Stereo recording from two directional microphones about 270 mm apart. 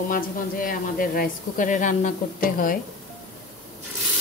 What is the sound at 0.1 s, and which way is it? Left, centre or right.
Speech, left.